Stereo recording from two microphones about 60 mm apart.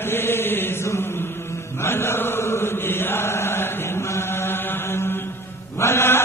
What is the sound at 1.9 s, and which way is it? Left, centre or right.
Chant, left.